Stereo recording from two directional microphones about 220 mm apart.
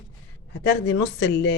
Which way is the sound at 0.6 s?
55° left (ahead or behind).